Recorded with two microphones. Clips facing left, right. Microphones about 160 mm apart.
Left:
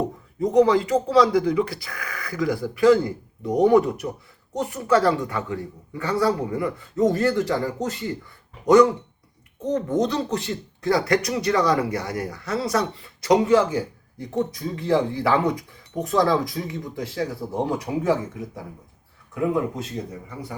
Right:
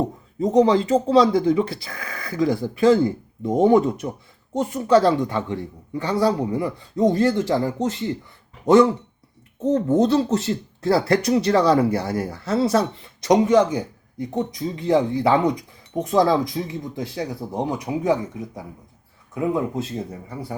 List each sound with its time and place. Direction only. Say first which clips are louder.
0.3 s speech: right 1 dB; 25° right (ahead or behind)